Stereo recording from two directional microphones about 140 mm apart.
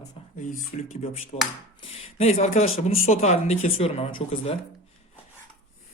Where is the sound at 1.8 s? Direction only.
45° left (ahead or behind).